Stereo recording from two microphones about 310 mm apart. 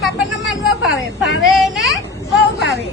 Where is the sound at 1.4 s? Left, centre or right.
Centre.